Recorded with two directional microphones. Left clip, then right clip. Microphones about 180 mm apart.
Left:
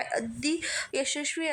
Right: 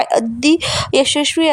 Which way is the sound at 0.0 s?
40° right (ahead or behind).